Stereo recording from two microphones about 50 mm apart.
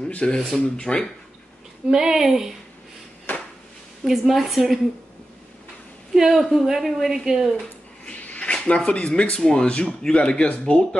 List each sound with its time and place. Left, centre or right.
0.3 s speech: centre
1.9 s speech: centre
4.0 s a woman's voice: centre
6.1 s a woman's voice: centre
8.0 s cat: left
8.5 s speech: left